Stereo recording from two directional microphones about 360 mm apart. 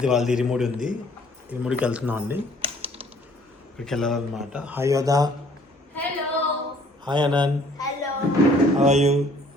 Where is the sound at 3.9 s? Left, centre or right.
Centre.